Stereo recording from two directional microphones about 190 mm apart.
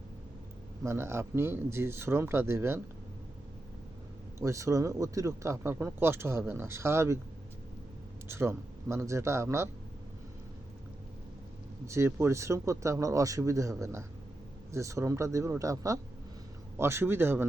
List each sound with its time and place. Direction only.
0.8 s speech: 15° right (ahead or behind)
4.4 s speech: 15° right (ahead or behind)
8.3 s speech: 15° right (ahead or behind)
11.9 s speech: 15° right (ahead or behind)